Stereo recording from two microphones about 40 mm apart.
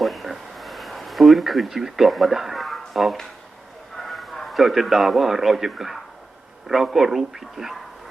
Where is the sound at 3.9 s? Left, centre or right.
Centre.